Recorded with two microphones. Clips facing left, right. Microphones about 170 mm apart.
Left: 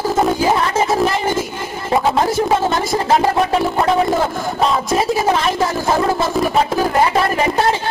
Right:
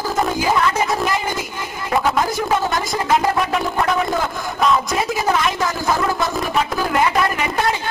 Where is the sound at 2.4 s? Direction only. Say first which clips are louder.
Left 3 dB; 25° left (ahead or behind).